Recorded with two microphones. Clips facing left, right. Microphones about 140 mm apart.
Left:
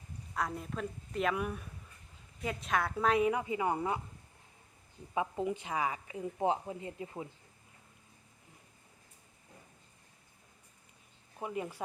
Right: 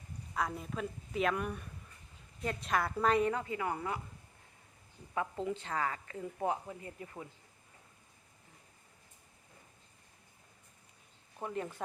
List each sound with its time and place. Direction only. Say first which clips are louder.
0.3 s a woman's voice: even; centre (ahead or behind)
3.4 s a woman's voice: left 4 dB; 20° left (ahead or behind)
5.1 s a woman's voice: left 2 dB; 15° left (ahead or behind)
11.3 s speech: left 1 dB; 5° left (ahead or behind)